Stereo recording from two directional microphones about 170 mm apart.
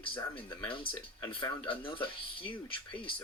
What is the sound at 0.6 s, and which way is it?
Speech, 30° left (ahead or behind).